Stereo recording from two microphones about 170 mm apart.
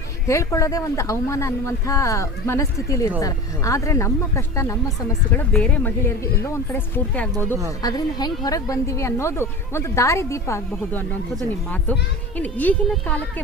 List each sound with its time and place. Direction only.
0.3 s a woman's voice: 20° left (ahead or behind)
5.4 s a woman's voice: 5° left (ahead or behind)
7.8 s a woman's voice: 25° left (ahead or behind)
12.4 s a woman's voice: 10° left (ahead or behind)